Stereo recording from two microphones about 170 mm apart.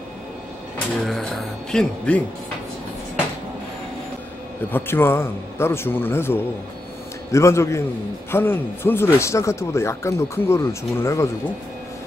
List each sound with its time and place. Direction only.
1.0 s a man's voice: centre (ahead or behind)
4.6 s a man's voice: 10° left (ahead or behind)